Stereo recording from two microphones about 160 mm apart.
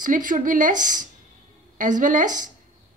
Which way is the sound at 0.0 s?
55° right (ahead or behind).